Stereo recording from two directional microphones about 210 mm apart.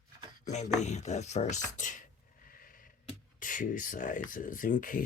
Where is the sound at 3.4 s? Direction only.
40° left (ahead or behind).